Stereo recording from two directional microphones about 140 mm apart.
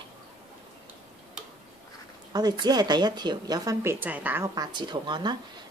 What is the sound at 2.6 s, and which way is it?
Speech, 30° right (ahead or behind).